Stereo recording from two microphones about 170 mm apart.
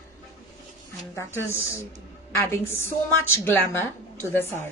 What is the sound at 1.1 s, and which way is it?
A woman's voice, 15° left (ahead or behind).